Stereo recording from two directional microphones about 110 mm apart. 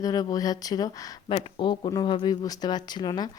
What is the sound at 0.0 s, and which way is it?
Speech, 35° left (ahead or behind).